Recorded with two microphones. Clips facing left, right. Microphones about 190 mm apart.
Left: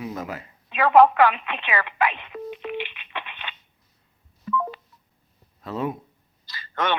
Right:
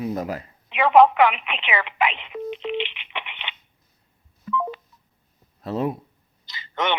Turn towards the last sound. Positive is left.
turn(degrees=-20)  # may be behind; listen again after turning